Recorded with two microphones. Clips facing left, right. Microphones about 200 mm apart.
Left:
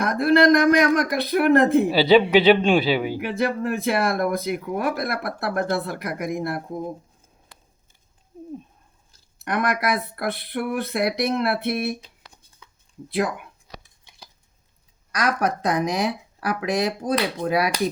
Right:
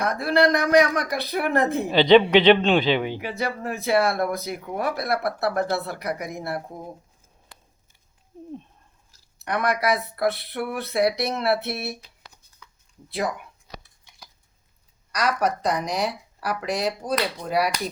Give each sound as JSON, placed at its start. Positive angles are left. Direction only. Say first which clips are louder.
{"t": 0.0, "sound": "speech", "louder": "left 3 dB", "side_deg": 55}
{"t": 1.9, "sound": "speech", "louder": "even", "side_deg": 5}
{"t": 3.2, "sound": "speech", "louder": "left 5 dB", "side_deg": 55}
{"t": 9.4, "sound": "speech", "louder": "even", "side_deg": 50}
{"t": 15.2, "sound": "speech", "louder": "left 1 dB", "side_deg": 55}